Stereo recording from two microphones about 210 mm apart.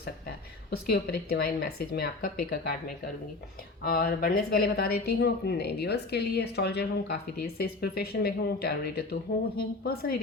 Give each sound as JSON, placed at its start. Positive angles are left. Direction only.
{"t": 1.0, "sound": "speech", "side_deg": 50}